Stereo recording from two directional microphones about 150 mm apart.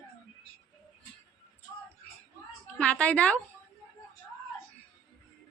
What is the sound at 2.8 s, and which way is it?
Speech, 10° left (ahead or behind).